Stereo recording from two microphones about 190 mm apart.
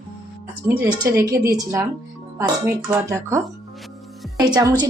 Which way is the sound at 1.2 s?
20° right (ahead or behind).